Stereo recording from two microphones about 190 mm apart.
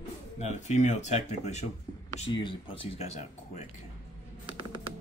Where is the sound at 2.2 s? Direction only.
25° left (ahead or behind).